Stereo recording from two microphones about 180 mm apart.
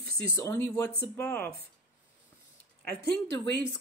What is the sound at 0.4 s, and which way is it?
Speech, 15° left (ahead or behind).